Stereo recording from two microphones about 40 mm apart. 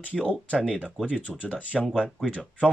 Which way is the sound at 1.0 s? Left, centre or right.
Left.